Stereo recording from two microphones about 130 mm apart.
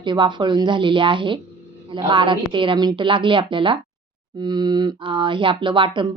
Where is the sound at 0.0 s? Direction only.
40° right (ahead or behind).